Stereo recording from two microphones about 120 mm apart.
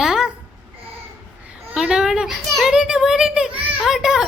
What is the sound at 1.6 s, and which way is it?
A child's voice, 10° right (ahead or behind).